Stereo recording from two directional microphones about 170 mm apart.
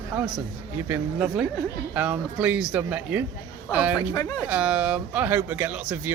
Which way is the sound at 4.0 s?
20° left (ahead or behind).